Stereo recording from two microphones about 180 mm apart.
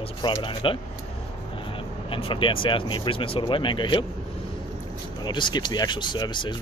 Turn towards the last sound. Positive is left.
turn(degrees=25)  # may be behind; listen again after turning